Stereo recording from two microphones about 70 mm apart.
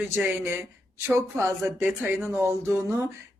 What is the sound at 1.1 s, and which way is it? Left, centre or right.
Speech, right.